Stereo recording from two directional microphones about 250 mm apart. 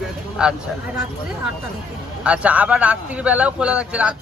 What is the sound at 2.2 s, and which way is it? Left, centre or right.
A man's voice, centre.